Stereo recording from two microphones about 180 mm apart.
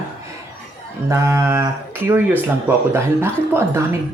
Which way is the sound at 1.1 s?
15° right (ahead or behind).